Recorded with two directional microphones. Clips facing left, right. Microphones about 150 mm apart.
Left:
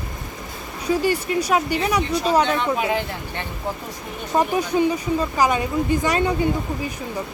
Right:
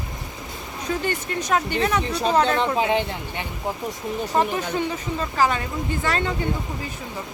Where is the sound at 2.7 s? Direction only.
20° right (ahead or behind).